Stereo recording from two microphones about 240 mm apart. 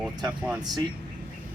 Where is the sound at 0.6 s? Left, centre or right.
Centre.